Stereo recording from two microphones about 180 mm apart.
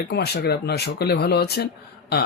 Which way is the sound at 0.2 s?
65° left (ahead or behind).